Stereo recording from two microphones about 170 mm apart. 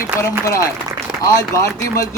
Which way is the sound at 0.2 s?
20° left (ahead or behind).